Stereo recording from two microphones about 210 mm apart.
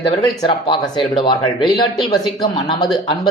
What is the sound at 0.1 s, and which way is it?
Speech, 20° left (ahead or behind).